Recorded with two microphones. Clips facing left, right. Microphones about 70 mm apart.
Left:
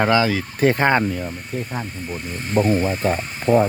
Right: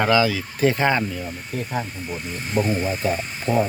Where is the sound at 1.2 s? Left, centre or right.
Centre.